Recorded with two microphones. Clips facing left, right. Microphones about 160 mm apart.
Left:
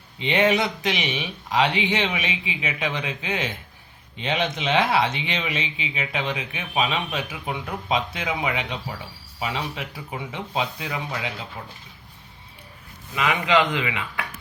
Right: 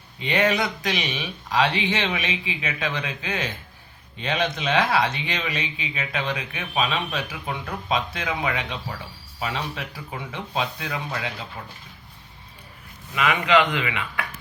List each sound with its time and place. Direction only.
0.2 s speech: 20° left (ahead or behind)
13.1 s speech: 20° left (ahead or behind)